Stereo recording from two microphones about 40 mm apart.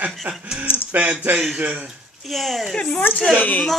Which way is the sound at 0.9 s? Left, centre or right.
Right.